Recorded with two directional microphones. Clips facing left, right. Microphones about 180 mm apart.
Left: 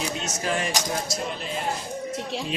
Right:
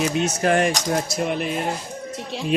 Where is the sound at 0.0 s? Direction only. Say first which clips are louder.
Right 8 dB; 60° right (ahead or behind).